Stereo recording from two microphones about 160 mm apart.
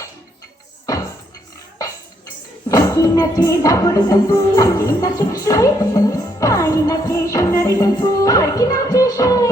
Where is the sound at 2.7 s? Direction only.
20° left (ahead or behind).